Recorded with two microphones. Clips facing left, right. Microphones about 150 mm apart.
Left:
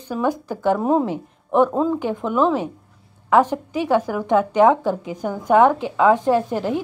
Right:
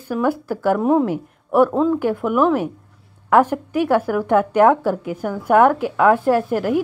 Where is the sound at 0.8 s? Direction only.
20° left (ahead or behind).